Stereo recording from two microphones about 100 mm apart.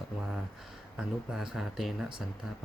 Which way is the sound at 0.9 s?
5° right (ahead or behind).